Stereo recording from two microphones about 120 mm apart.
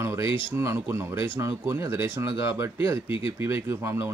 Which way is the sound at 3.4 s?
20° right (ahead or behind).